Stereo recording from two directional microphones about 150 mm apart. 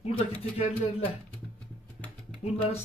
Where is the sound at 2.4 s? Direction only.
40° left (ahead or behind).